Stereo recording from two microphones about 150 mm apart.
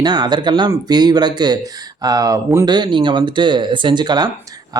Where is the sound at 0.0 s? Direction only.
30° right (ahead or behind).